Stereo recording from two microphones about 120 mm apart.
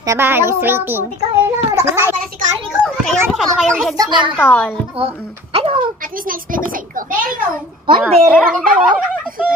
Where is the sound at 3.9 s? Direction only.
35° right (ahead or behind).